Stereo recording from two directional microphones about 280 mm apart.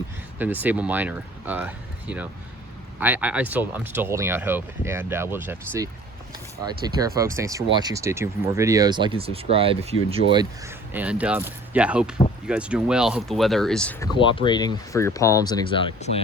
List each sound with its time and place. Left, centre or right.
0.3 s speech: centre
7.2 s speech: centre
14.2 s speech: centre